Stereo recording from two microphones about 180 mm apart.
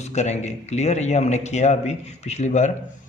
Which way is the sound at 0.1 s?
40° left (ahead or behind).